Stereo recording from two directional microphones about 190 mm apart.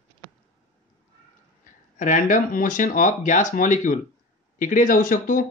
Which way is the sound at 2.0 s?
40° left (ahead or behind).